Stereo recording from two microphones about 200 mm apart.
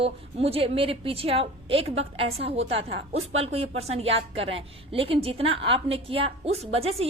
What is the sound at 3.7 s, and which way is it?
Speech, 30° right (ahead or behind).